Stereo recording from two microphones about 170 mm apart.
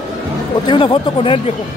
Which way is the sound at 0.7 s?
30° left (ahead or behind).